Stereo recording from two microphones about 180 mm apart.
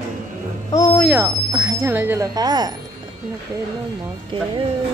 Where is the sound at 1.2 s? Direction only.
20° right (ahead or behind).